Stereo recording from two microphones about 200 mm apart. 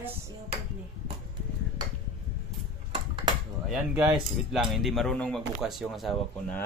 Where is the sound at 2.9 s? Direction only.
25° right (ahead or behind).